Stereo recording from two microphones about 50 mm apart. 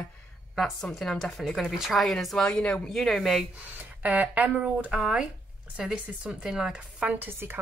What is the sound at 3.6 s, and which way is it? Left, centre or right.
Speech, right.